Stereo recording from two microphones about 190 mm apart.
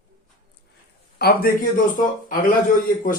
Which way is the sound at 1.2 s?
50° left (ahead or behind).